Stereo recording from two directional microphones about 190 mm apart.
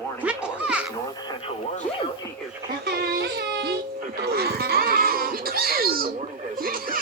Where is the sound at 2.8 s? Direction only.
55° right (ahead or behind).